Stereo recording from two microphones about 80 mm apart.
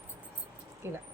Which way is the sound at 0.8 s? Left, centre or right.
Right.